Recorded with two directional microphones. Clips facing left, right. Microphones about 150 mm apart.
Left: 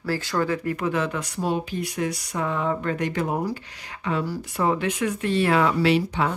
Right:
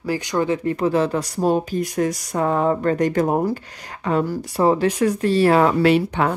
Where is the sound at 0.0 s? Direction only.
15° right (ahead or behind); by 4.4 s 45° right (ahead or behind).